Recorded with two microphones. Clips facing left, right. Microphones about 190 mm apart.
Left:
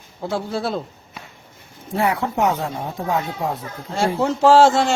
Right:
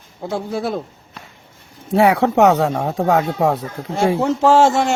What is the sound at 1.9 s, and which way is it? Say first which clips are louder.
Speech: right 7 dB; 75° right (ahead or behind).